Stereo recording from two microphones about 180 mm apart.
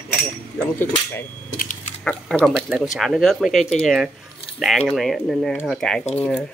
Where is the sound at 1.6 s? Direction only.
45° left (ahead or behind).